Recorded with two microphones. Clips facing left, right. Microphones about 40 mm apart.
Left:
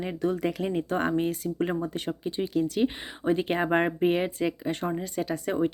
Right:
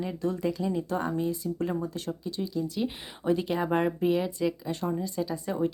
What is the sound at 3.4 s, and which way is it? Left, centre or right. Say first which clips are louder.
Speech: left 2 dB; left.